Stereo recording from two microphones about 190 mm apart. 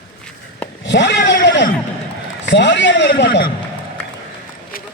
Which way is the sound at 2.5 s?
65° left (ahead or behind).